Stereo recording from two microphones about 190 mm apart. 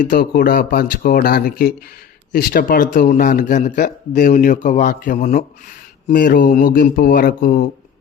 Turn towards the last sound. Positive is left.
turn(degrees=50)  # may be behind; listen again after turning